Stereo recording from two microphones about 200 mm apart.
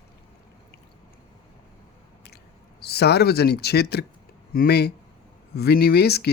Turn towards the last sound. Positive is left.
turn(degrees=55)  # may be behind; listen again after turning